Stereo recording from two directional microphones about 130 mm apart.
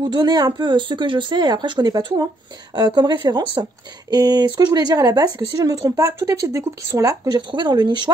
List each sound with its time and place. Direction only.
0.0 s speech: 35° right (ahead or behind)